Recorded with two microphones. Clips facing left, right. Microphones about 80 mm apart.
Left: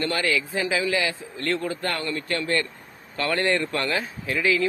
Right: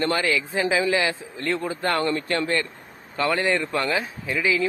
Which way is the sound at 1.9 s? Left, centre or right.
Right.